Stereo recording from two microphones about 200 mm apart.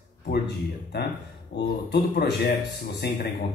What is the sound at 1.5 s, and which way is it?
A man's voice, 55° left (ahead or behind).